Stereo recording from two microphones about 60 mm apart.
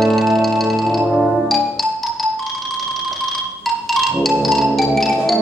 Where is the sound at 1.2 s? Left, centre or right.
Centre.